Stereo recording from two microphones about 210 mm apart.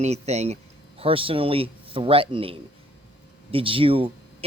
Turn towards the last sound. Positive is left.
turn(degrees=-25)  # may be behind; listen again after turning